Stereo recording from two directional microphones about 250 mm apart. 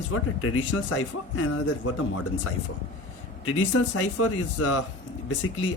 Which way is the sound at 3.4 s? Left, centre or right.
Left.